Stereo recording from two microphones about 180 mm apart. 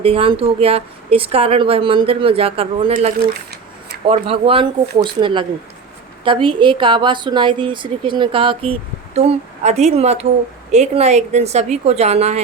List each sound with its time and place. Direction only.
0.0 s speech: 30° right (ahead or behind)
4.0 s a woman's voice: 30° right (ahead or behind)